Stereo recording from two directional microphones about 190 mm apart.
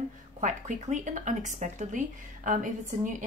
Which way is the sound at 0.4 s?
40° right (ahead or behind).